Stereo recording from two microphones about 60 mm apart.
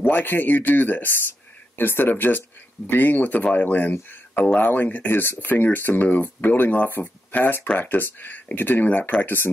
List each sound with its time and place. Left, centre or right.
0.0 s speech: left